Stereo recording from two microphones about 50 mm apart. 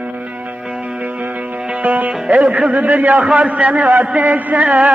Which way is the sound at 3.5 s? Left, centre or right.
Right.